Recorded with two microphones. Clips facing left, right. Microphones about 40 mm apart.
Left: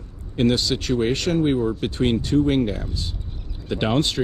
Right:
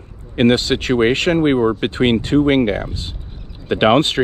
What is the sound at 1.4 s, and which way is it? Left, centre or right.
Speech, right.